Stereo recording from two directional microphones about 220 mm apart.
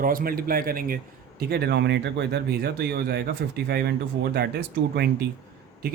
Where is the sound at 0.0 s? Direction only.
40° right (ahead or behind).